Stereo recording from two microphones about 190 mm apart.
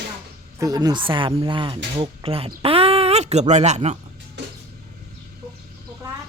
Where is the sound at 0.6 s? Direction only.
20° right (ahead or behind); by 3.9 s 35° right (ahead or behind).